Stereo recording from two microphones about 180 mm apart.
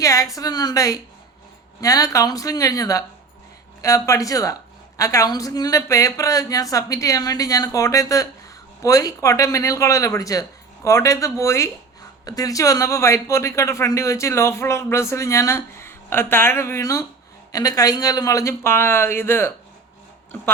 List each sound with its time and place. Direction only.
0.0 s a man's voice: 15° left (ahead or behind)